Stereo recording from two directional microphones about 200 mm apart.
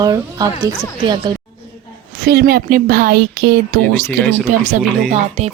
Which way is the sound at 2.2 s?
55° right (ahead or behind).